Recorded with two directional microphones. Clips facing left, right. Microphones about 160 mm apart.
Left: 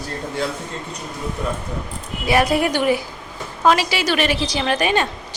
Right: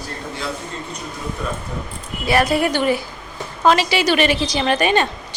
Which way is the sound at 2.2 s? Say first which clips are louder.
Even; 15° left (ahead or behind).